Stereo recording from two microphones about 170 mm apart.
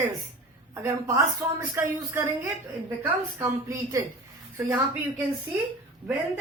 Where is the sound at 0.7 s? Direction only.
15° right (ahead or behind).